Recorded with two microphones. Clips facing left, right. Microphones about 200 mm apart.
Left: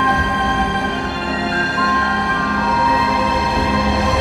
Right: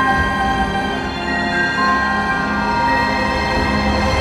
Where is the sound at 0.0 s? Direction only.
Centre (ahead or behind).